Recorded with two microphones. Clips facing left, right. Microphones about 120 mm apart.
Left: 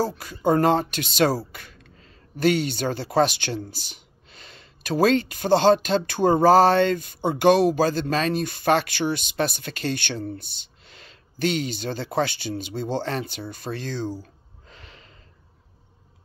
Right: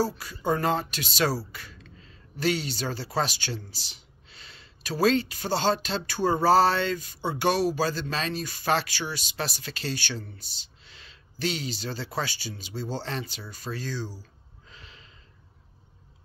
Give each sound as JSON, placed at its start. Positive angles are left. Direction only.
{"t": 0.0, "sound": "speech", "side_deg": 50}
{"t": 14.7, "sound": "snort", "side_deg": 50}